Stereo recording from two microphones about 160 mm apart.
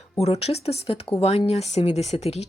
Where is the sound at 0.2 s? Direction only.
40° left (ahead or behind).